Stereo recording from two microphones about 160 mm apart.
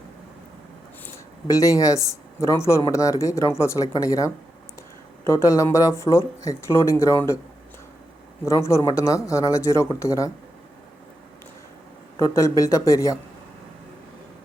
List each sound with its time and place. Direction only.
1.0 s speech: 20° left (ahead or behind)
8.4 s speech: 20° left (ahead or behind)
12.2 s speech: 20° left (ahead or behind)